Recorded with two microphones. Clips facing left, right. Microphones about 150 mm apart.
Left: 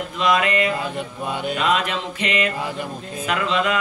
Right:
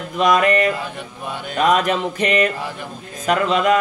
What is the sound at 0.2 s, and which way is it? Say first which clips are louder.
Speech: right 4 dB; 45° right (ahead or behind).